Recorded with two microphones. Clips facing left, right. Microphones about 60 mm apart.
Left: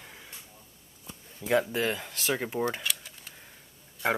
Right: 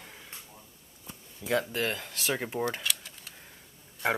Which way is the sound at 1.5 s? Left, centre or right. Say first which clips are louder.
Left 3 dB; centre.